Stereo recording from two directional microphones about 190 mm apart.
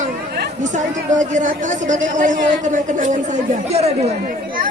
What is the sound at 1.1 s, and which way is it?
A woman's voice, 40° right (ahead or behind).